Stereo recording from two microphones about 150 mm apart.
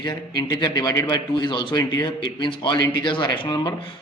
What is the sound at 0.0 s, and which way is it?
A man's voice, 25° left (ahead or behind).